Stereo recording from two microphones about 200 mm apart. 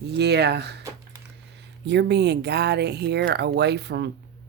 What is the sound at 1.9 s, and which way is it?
Speech, 60° right (ahead or behind).